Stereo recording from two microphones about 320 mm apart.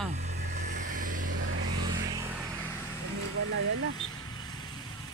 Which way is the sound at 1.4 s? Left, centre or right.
Right.